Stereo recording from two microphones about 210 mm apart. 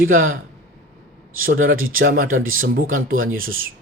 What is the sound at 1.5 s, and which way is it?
Speech, 70° right (ahead or behind).